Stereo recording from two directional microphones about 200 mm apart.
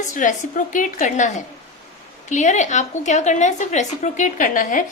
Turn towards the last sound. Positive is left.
turn(degrees=40)  # may be behind; listen again after turning